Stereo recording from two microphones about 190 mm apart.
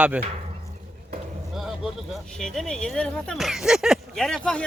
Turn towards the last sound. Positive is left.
turn(degrees=0)  # may be behind; listen again after turning